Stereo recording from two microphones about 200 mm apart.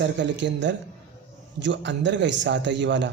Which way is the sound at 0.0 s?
65° right (ahead or behind).